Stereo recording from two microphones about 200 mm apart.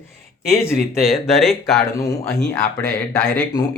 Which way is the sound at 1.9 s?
15° left (ahead or behind).